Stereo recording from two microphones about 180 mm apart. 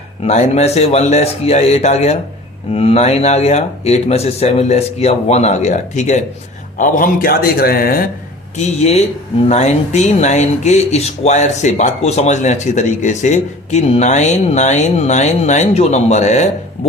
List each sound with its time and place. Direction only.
0.2 s a man's voice: 40° left (ahead or behind); by 8.0 s 55° left (ahead or behind)
8.5 s speech: 40° left (ahead or behind)